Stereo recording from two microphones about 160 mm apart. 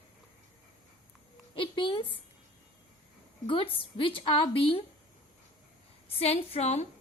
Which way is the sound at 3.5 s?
35° left (ahead or behind).